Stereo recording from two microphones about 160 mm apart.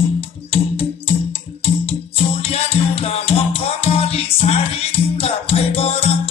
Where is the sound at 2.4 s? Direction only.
35° left (ahead or behind).